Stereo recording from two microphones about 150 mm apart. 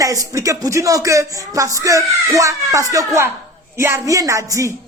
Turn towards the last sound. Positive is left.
turn(degrees=-20)  # may be behind; listen again after turning